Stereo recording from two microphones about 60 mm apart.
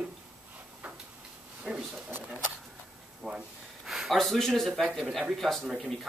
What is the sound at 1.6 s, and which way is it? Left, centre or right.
Speech, centre.